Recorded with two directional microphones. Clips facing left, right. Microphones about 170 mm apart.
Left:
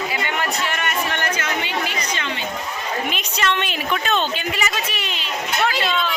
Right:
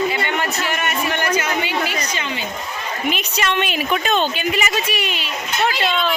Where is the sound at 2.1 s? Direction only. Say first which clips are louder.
Right 1 dB; 5° right (ahead or behind).